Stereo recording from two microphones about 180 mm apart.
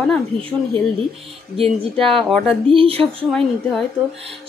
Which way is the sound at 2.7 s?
30° right (ahead or behind).